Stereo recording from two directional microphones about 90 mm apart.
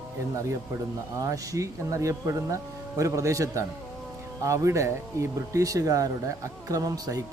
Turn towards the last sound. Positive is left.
turn(degrees=-45)  # may be behind; listen again after turning